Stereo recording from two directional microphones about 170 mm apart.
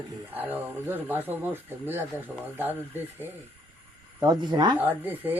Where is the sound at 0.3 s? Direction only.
10° right (ahead or behind).